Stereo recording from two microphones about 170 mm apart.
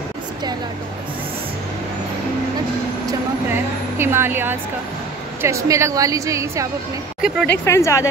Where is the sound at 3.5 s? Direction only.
15° right (ahead or behind).